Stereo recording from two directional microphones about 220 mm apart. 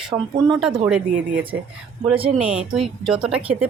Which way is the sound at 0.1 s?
15° right (ahead or behind).